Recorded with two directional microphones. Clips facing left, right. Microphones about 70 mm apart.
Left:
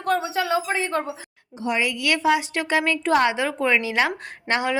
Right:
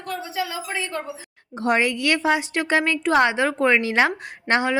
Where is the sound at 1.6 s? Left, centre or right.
Right.